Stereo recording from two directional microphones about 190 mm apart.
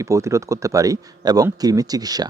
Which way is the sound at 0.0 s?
15° right (ahead or behind).